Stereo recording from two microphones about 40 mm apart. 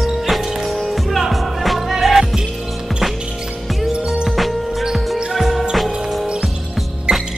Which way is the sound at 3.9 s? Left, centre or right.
Right.